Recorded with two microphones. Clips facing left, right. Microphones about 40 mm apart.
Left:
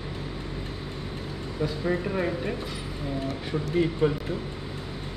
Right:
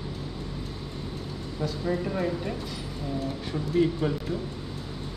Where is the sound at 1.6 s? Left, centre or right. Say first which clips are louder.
Left 2 dB; left.